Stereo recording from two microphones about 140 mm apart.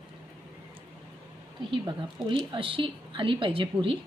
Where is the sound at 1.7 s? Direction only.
35° right (ahead or behind).